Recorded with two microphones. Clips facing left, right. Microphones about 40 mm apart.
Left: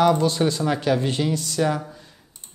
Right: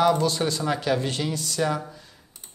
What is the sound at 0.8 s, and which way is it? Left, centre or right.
Speech, left.